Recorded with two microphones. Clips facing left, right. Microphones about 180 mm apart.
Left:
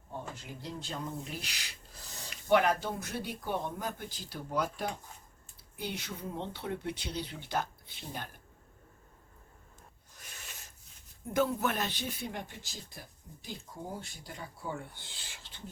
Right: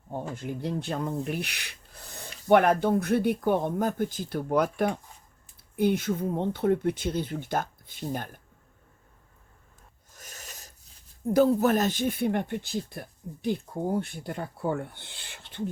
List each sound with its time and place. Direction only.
0.1 s speech: 50° right (ahead or behind)
10.2 s filing: 40° right (ahead or behind)
11.3 s speech: 35° right (ahead or behind); by 15.6 s 60° right (ahead or behind)